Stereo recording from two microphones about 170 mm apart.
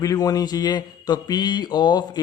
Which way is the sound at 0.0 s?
20° left (ahead or behind).